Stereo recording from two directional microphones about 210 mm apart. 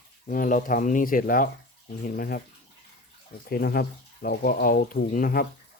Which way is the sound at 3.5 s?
45° left (ahead or behind).